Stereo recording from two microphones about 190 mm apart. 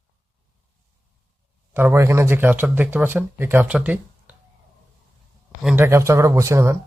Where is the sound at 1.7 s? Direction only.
10° right (ahead or behind).